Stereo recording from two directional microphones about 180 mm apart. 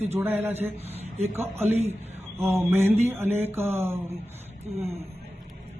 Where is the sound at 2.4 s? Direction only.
15° right (ahead or behind).